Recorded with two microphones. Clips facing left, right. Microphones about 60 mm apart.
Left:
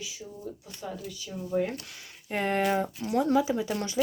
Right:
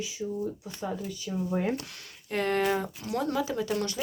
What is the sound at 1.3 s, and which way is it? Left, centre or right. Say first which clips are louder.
Speech: right 7 dB; right.